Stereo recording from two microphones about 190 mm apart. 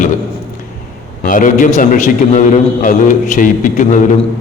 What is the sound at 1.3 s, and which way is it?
A man's voice, 45° left (ahead or behind).